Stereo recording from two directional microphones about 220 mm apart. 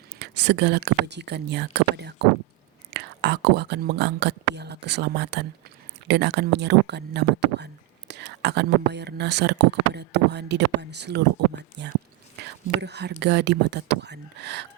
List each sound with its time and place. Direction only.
0.2 s speech: 50° right (ahead or behind)